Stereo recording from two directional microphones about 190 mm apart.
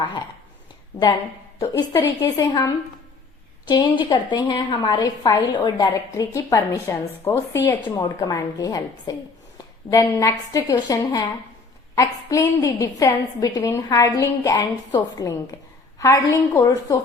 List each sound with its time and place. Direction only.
1.5 s a woman's voice: 15° left (ahead or behind)